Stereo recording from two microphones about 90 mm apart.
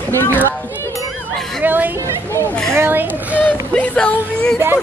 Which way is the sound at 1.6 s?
20° right (ahead or behind).